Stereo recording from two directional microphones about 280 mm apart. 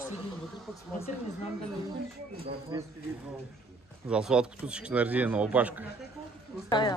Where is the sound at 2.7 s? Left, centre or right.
Centre.